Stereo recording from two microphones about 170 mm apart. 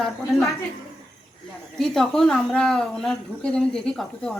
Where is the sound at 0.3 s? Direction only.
Centre (ahead or behind).